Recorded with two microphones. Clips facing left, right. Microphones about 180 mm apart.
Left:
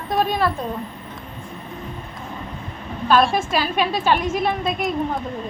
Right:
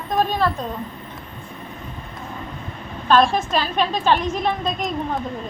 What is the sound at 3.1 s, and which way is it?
A woman's voice, 10° left (ahead or behind).